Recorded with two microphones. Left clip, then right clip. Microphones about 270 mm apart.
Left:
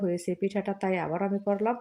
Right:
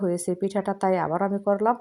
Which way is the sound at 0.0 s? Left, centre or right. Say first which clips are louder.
Right 3 dB; centre.